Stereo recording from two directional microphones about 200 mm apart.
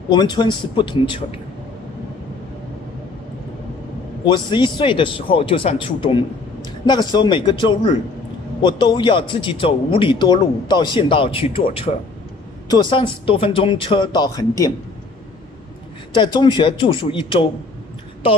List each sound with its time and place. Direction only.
0.1 s a man's voice: 20° left (ahead or behind)
4.2 s a man's voice: 20° left (ahead or behind)
16.2 s a man's voice: 20° left (ahead or behind)